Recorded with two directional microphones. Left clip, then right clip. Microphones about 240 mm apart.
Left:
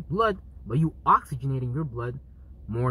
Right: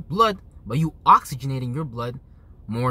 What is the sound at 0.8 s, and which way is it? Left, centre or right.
Speech, centre.